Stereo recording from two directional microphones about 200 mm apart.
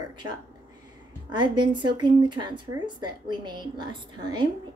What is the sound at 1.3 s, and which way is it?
A woman's voice, 25° right (ahead or behind).